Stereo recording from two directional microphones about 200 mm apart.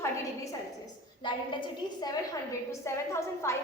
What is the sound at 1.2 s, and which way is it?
A woman's voice, 20° left (ahead or behind).